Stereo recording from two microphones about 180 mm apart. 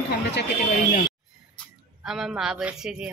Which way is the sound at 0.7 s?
50° left (ahead or behind).